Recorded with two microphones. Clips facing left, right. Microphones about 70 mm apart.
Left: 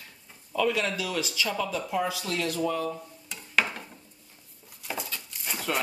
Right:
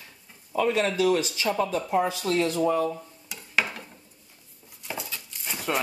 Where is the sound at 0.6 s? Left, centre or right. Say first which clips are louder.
Right 4 dB; right.